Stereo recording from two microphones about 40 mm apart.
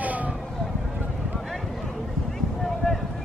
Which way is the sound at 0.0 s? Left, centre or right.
Right.